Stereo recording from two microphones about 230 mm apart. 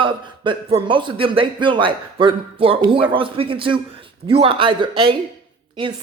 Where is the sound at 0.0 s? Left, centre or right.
Right.